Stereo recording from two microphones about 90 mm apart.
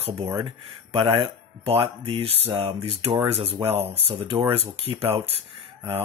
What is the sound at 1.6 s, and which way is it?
Speech, 90° right.